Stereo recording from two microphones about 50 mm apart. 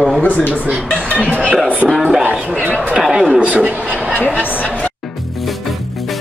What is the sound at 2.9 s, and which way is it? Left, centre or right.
Speech, centre.